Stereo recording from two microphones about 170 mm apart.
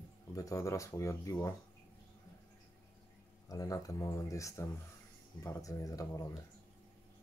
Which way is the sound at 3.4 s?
20° left (ahead or behind).